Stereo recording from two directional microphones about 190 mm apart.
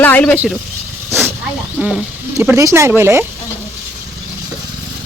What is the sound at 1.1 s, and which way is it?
Hiss, 10° right (ahead or behind).